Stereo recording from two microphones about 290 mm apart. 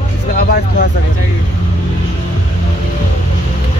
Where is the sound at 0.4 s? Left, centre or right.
Left.